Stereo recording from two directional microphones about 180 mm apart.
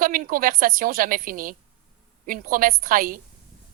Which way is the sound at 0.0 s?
50° right (ahead or behind).